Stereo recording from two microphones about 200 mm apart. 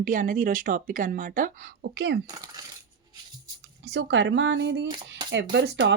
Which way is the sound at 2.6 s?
20° right (ahead or behind).